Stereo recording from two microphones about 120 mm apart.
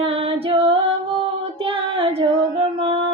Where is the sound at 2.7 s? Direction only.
50° right (ahead or behind).